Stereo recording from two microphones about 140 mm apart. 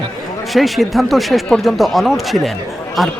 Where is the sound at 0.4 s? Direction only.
Centre (ahead or behind).